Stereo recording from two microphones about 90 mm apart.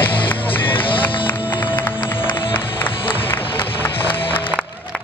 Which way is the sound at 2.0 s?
60° left (ahead or behind).